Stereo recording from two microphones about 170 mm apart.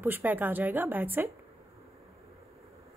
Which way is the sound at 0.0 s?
10° right (ahead or behind).